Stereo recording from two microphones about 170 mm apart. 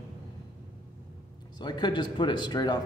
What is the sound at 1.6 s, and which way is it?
Speech, 25° left (ahead or behind).